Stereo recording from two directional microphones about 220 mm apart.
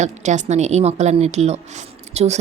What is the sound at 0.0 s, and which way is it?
Speech, 30° right (ahead or behind).